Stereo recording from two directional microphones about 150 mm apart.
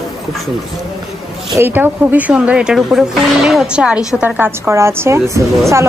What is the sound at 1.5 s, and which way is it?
A woman's voice, 15° right (ahead or behind).